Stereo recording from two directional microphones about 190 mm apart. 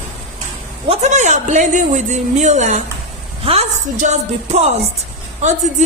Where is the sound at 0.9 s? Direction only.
35° right (ahead or behind).